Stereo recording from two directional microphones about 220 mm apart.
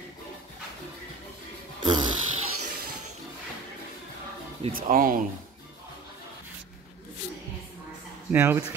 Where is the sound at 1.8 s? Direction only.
20° right (ahead or behind).